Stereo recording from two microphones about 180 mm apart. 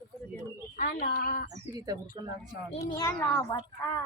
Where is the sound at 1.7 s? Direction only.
20° right (ahead or behind).